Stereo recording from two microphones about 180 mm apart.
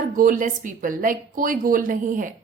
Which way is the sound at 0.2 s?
50° right (ahead or behind).